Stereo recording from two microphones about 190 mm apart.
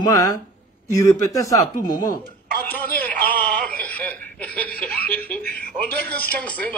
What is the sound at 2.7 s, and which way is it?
Speech, 10° left (ahead or behind).